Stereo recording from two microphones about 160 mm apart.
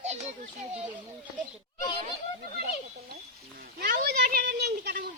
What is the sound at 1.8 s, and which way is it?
Speech, 30° left (ahead or behind).